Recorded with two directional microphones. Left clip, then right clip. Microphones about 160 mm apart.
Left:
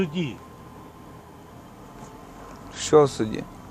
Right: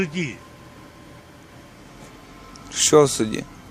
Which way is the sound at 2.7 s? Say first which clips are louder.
Right 3 dB; 65° right (ahead or behind).